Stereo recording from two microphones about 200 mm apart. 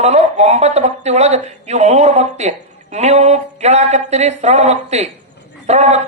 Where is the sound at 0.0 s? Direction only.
35° right (ahead or behind).